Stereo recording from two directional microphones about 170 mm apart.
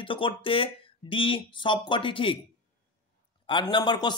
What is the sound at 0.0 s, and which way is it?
Speech, 30° left (ahead or behind).